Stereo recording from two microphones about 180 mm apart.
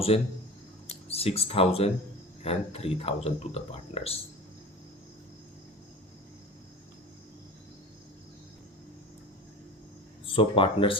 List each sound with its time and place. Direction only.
0.1 s speech: 35° left (ahead or behind)
10.2 s speech: 30° left (ahead or behind)